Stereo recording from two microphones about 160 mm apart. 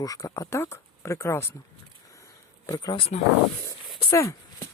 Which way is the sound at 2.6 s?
25° left (ahead or behind).